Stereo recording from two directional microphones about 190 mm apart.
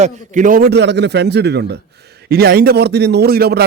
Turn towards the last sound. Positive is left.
turn(degrees=-55)  # may be behind; listen again after turning